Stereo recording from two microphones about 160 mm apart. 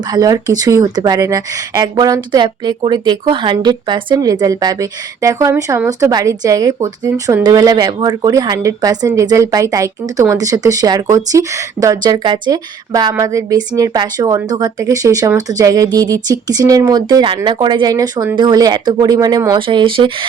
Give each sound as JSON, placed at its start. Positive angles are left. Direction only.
{"t": 0.1, "sound": "a woman's voice", "side_deg": -25}